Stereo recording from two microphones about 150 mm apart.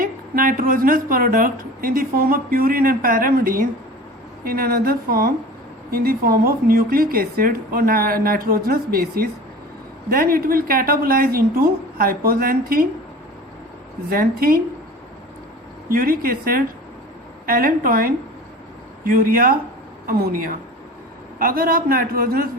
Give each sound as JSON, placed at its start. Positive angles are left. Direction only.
{"t": 0.0, "sound": "a woman's voice", "side_deg": -70}
{"t": 4.4, "sound": "speech", "side_deg": -85}
{"t": 5.9, "sound": "a woman's voice", "side_deg": -90}
{"t": 14.1, "sound": "a woman's voice", "side_deg": -75}
{"t": 15.9, "sound": "a woman's voice", "side_deg": -75}